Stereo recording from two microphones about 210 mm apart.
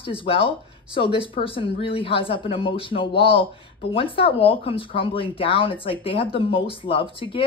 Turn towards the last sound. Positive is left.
turn(degrees=25)  # may be behind; listen again after turning